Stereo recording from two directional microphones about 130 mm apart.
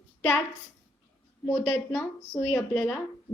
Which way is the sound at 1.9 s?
20° left (ahead or behind).